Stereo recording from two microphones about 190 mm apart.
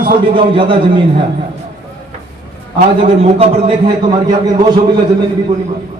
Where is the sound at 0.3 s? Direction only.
25° right (ahead or behind).